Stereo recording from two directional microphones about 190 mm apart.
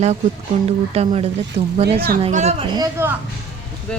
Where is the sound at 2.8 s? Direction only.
10° right (ahead or behind).